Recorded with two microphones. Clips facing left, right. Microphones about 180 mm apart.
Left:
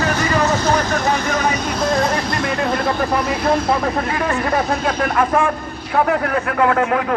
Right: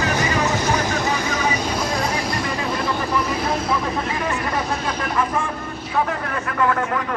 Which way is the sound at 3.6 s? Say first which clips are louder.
Left 4 dB; 60° left (ahead or behind).